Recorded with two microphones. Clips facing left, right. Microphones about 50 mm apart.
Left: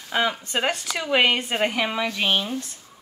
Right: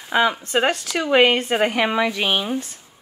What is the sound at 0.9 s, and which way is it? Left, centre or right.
A woman's voice, centre.